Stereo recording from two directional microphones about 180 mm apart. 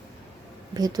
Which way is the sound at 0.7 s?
20° right (ahead or behind).